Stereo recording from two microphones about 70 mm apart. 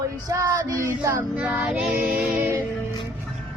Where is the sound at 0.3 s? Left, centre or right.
Right.